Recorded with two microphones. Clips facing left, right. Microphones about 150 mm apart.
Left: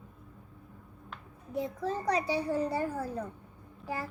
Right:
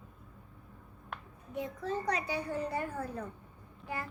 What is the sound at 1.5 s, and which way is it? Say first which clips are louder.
A child's voice: left 3 dB; 35° left (ahead or behind).